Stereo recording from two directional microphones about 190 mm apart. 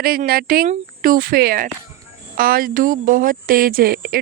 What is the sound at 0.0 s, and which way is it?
Speech, 50° right (ahead or behind).